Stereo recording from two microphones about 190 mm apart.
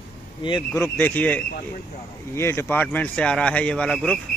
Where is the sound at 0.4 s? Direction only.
25° left (ahead or behind).